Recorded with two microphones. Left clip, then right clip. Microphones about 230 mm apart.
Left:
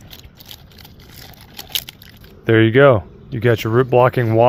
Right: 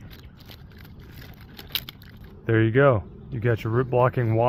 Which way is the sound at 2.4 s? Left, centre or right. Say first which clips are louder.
Left 8 dB; left.